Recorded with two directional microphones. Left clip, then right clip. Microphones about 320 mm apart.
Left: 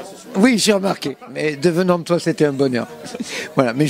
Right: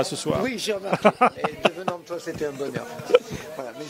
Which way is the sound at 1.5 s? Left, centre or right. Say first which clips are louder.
Left 7 dB; left.